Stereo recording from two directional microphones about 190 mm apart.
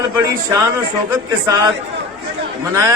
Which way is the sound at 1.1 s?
15° right (ahead or behind).